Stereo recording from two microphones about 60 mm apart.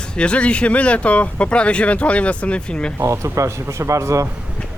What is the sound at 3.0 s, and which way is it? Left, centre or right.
Speech, right.